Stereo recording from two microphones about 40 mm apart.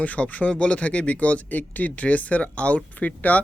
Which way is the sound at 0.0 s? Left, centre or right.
Left.